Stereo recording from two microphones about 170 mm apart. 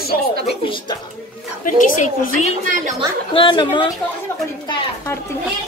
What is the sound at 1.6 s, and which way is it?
Speech, 50° left (ahead or behind).